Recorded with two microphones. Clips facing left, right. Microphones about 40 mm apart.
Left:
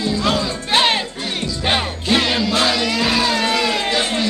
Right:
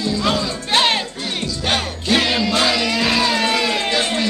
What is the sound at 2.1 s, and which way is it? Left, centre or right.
Music, centre.